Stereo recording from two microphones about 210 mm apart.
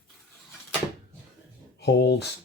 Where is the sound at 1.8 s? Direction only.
50° left (ahead or behind).